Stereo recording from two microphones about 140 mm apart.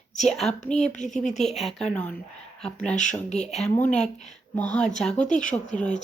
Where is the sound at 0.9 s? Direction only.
60° left (ahead or behind).